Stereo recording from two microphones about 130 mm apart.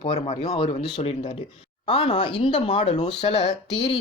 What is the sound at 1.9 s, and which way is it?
Speech, 40° left (ahead or behind).